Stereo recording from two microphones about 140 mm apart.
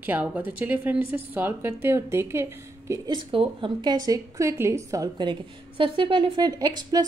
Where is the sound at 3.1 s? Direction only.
40° right (ahead or behind); by 5.1 s 20° right (ahead or behind).